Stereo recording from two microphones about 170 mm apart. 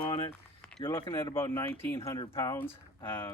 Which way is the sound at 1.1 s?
15° left (ahead or behind).